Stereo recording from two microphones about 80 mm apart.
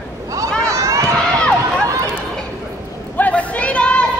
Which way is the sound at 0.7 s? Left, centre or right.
Right.